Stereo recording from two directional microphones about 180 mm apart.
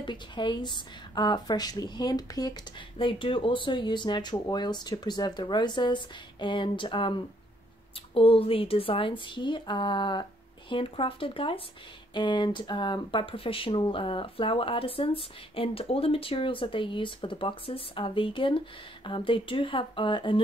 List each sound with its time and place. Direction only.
0.0 s speech: 25° left (ahead or behind)